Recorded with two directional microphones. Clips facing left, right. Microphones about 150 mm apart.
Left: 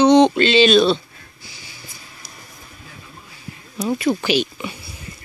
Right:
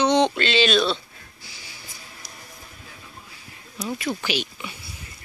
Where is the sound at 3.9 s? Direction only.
25° left (ahead or behind).